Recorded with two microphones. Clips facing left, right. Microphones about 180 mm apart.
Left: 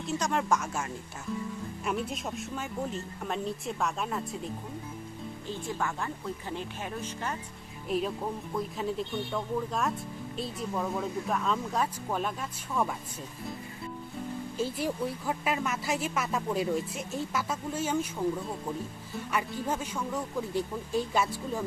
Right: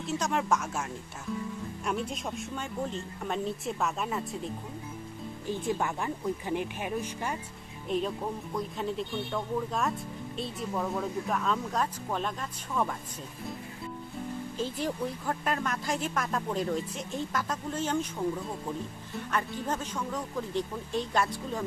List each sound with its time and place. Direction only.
0.0 s speech: centre (ahead or behind)
5.5 s speech: 15° right (ahead or behind)
7.9 s speech: 5° left (ahead or behind)
14.6 s speech: 10° left (ahead or behind)